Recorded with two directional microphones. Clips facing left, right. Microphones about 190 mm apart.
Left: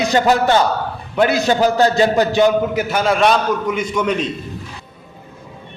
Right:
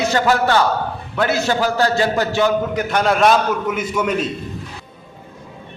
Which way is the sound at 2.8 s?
5° left (ahead or behind).